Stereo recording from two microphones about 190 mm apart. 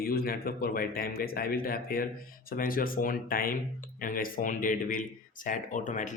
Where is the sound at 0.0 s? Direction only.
50° left (ahead or behind).